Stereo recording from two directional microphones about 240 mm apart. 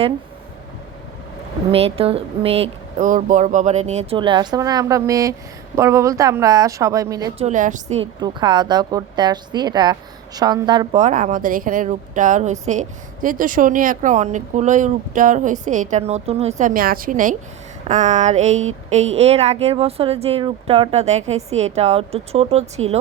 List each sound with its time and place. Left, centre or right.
1.7 s a woman's voice: right
7.4 s speech: right
8.2 s a woman's voice: centre
11.0 s a woman's voice: right